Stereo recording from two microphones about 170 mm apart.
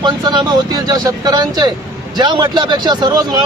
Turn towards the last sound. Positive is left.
turn(degrees=-25)  # may be behind; listen again after turning